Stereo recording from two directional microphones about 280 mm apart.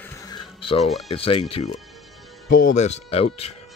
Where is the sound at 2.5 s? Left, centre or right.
Left.